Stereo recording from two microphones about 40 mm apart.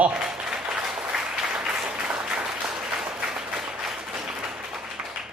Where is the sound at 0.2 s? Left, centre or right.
Centre.